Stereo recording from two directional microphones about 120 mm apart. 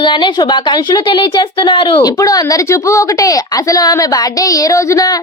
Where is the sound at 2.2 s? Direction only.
30° left (ahead or behind).